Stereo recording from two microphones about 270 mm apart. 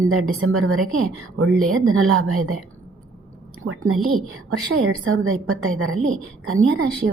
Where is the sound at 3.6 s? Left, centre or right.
Right.